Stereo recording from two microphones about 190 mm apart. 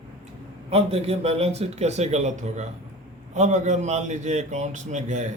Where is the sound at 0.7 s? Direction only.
35° right (ahead or behind).